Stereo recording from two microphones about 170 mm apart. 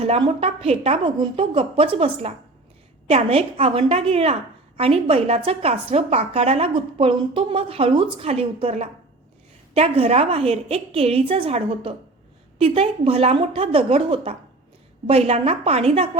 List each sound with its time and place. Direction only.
0.0 s a woman's voice: 35° right (ahead or behind)